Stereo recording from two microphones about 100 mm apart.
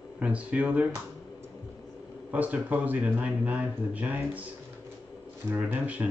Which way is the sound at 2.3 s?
15° right (ahead or behind).